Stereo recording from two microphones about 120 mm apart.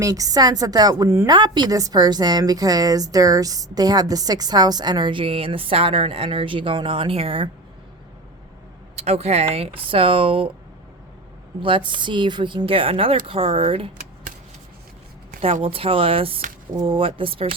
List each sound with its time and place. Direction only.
0.0 s a woman's voice: 30° right (ahead or behind)
1.0 s speech: 20° right (ahead or behind)
1.3 s a woman's voice: 40° right (ahead or behind)
9.0 s speech: 60° right (ahead or behind)
11.6 s speech: 45° right (ahead or behind)
15.6 s speech: 50° right (ahead or behind)